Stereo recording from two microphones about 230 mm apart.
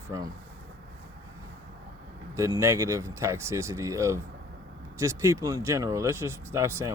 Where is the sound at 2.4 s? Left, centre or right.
Centre.